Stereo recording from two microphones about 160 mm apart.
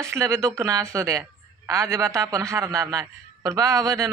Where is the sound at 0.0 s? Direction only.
15° right (ahead or behind).